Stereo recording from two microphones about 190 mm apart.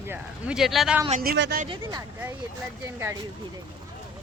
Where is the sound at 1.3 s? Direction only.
70° right (ahead or behind).